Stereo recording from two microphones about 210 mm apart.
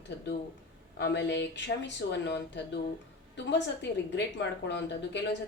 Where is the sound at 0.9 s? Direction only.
55° left (ahead or behind).